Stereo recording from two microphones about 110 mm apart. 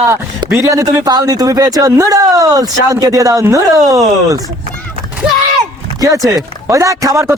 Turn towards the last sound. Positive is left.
turn(degrees=-30)  # may be behind; listen again after turning